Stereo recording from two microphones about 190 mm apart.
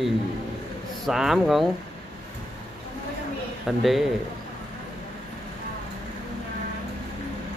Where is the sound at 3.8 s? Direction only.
Centre (ahead or behind).